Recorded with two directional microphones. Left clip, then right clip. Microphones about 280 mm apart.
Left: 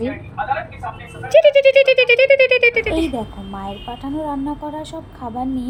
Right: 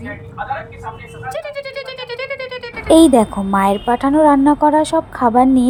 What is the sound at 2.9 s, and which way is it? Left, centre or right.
A woman's voice, right.